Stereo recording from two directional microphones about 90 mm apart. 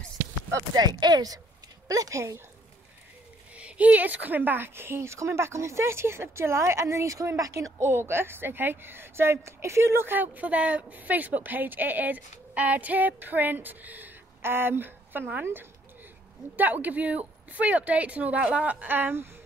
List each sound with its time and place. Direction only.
0.5 s speech: 40° right (ahead or behind)
3.5 s a woman's voice: 15° right (ahead or behind)